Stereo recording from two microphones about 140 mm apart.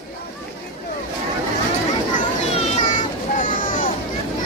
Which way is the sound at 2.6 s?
50° left (ahead or behind).